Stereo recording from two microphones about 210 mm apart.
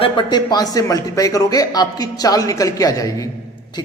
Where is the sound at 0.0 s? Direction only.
20° left (ahead or behind).